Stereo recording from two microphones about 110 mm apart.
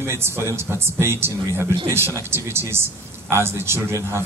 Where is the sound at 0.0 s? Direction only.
25° right (ahead or behind).